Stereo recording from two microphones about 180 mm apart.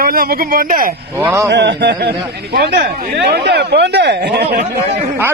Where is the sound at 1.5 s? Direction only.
75° right (ahead or behind).